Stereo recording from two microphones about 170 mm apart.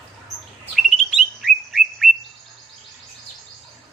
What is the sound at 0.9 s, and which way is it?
Bird, centre (ahead or behind).